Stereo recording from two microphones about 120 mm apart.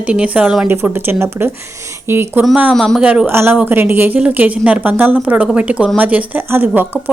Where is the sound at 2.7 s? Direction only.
Centre (ahead or behind).